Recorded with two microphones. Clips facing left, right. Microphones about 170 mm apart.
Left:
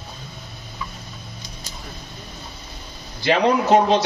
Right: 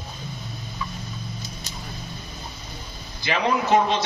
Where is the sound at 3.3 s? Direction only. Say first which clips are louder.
Left 4 dB; 35° left (ahead or behind).